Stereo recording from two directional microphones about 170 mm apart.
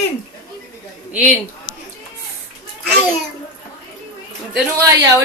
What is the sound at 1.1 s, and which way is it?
Speech, centre (ahead or behind).